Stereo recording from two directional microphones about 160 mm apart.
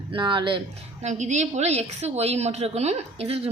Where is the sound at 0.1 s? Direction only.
30° right (ahead or behind).